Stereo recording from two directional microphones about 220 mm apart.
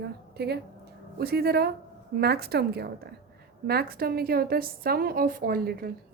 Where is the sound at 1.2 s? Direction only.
45° right (ahead or behind).